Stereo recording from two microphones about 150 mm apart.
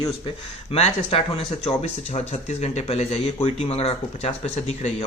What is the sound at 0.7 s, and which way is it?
Speech, 40° left (ahead or behind).